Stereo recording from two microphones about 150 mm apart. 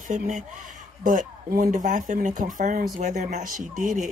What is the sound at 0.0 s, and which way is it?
Speech, 60° right (ahead or behind).